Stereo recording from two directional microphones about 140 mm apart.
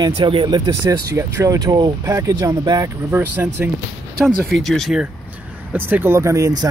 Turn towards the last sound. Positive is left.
turn(degrees=-25)  # may be behind; listen again after turning